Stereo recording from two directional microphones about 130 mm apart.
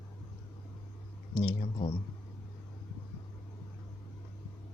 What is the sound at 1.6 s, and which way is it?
Speech, 45° left (ahead or behind).